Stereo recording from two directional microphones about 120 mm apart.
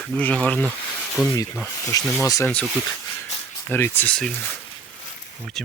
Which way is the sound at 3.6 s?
15° left (ahead or behind).